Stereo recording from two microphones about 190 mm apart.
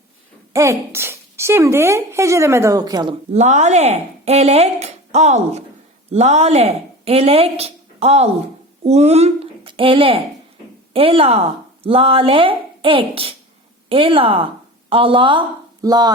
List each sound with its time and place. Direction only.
0.5 s a woman's voice: 15° right (ahead or behind)
3.3 s a woman's voice: 40° right (ahead or behind); by 16.1 s 20° right (ahead or behind)